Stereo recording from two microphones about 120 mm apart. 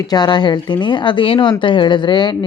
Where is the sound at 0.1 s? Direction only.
35° left (ahead or behind).